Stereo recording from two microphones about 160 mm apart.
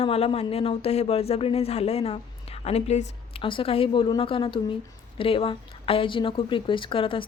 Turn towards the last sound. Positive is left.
turn(degrees=35)  # may be behind; listen again after turning